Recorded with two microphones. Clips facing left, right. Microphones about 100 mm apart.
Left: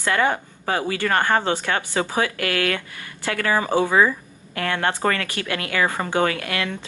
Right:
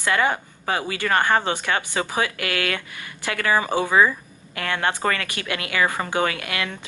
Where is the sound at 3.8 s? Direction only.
15° left (ahead or behind).